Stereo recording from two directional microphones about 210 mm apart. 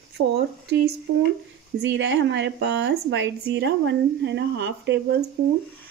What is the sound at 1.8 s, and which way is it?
A woman's voice, 55° right (ahead or behind).